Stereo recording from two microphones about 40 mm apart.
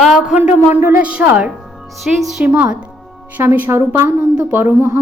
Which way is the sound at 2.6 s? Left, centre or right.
Right.